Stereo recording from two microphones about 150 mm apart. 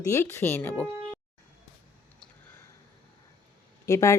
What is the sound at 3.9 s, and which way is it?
Speech, 20° left (ahead or behind).